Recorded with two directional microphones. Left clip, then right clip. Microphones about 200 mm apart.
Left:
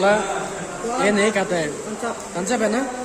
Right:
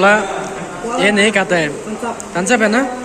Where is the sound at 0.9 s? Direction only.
Centre (ahead or behind).